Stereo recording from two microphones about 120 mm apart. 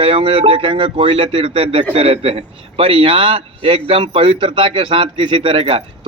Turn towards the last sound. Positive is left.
turn(degrees=-50)  # may be behind; listen again after turning